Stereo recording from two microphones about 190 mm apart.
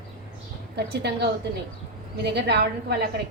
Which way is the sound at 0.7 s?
60° right (ahead or behind).